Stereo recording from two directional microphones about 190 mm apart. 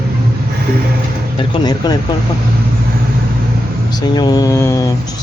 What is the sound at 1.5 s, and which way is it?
Speech, 20° left (ahead or behind).